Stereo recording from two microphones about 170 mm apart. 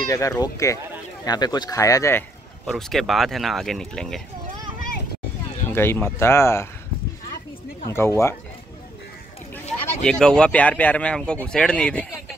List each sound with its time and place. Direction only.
0.1 s speech: 20° left (ahead or behind)
2.6 s speech: centre (ahead or behind)
5.7 s speech: 15° left (ahead or behind)
7.8 s speech: 15° left (ahead or behind)
10.0 s speech: 5° left (ahead or behind)